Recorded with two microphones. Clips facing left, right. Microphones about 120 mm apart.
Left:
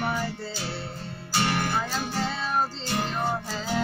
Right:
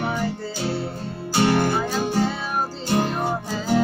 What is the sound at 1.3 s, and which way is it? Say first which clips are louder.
Music: right 7 dB; 30° right (ahead or behind).